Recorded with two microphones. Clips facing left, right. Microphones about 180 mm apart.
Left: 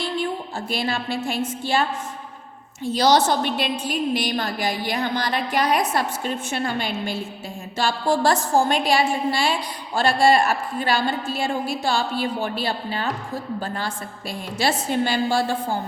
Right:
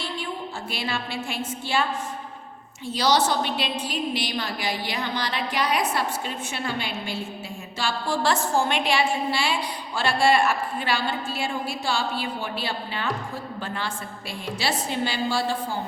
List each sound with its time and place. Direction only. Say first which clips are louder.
0.7 s a woman's voice: left 6 dB; 45° left (ahead or behind)
2.9 s a woman's voice: left 4 dB; 45° left (ahead or behind)